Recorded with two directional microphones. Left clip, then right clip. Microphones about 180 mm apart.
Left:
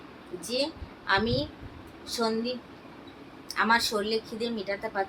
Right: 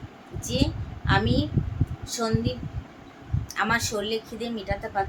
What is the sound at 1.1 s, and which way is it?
Speech, centre (ahead or behind).